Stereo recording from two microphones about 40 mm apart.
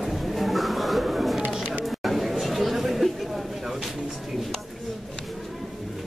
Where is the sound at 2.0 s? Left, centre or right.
Centre.